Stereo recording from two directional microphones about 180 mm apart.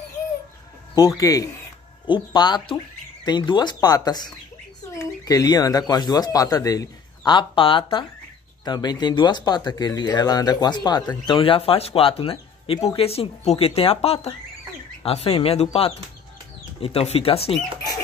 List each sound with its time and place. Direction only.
0.9 s speech: 20° left (ahead or behind)